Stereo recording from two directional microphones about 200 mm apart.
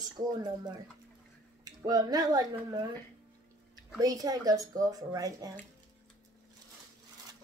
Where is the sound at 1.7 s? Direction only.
20° right (ahead or behind).